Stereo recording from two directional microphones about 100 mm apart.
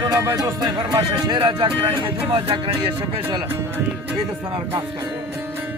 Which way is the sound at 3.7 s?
15° right (ahead or behind).